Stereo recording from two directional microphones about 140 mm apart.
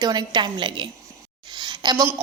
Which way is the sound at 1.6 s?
30° right (ahead or behind).